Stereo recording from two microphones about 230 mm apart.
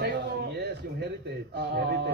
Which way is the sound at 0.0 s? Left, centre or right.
Right.